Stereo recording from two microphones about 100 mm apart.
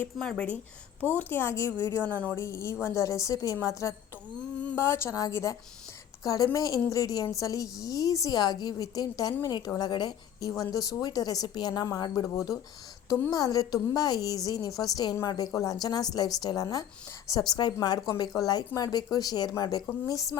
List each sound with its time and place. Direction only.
0.2 s a woman's voice: 10° left (ahead or behind); by 20.3 s 35° left (ahead or behind)